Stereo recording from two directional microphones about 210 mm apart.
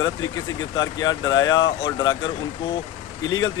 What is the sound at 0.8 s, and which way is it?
Speech, 15° left (ahead or behind).